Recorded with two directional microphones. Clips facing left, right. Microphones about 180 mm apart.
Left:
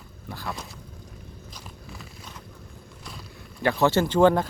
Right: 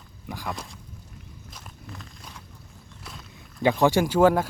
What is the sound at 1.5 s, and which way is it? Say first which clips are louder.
Walk: right 2 dB; centre (ahead or behind).